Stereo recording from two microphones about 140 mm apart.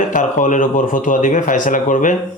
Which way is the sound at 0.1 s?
65° left (ahead or behind).